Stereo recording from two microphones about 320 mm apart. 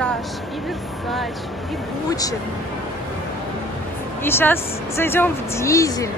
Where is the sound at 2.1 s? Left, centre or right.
Centre.